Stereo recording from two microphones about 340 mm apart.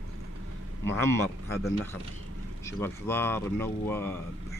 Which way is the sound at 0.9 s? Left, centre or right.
Centre.